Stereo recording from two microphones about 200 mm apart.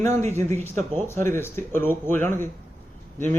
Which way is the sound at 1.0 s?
10° left (ahead or behind).